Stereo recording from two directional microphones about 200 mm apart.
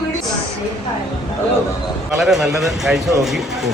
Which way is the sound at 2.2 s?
Centre (ahead or behind).